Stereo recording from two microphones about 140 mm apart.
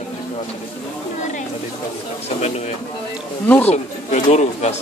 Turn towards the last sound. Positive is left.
turn(degrees=55)  # may be behind; listen again after turning